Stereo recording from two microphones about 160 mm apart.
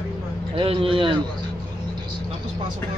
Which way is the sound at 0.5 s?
35° right (ahead or behind).